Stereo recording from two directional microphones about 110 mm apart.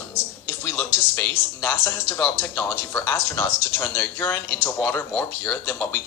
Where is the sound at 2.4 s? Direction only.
25° left (ahead or behind).